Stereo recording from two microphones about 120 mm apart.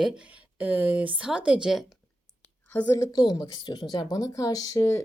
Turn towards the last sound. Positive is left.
turn(degrees=25)  # may be behind; listen again after turning